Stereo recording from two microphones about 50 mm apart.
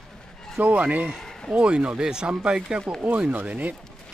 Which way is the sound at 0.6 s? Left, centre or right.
Right.